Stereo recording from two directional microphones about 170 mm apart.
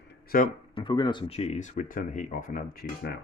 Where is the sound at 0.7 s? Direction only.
25° left (ahead or behind); by 2.9 s 50° left (ahead or behind).